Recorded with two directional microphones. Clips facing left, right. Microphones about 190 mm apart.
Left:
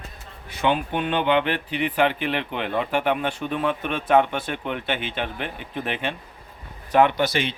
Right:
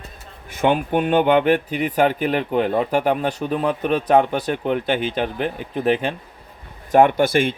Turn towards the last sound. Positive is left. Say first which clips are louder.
# right 6 dB
turn(degrees=-50)  # may be behind; listen again after turning